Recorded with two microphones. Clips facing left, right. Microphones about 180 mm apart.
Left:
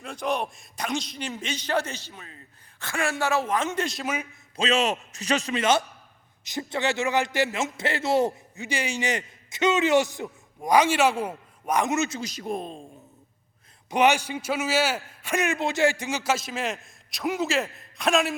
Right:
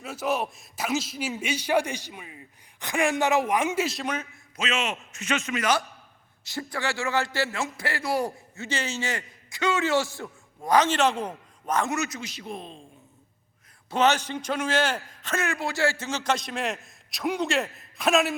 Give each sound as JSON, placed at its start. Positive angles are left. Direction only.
{"t": 0.0, "sound": "speech", "side_deg": -5}
{"t": 4.5, "sound": "a man's voice", "side_deg": 35}
{"t": 13.9, "sound": "a man's voice", "side_deg": 15}